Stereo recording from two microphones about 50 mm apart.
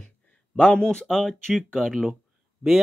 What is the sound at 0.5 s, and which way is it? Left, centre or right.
Speech, centre.